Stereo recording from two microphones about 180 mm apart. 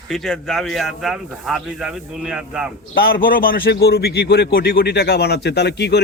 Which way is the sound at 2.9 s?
55° left (ahead or behind).